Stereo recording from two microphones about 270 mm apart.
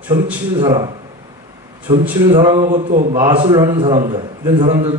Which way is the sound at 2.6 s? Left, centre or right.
Right.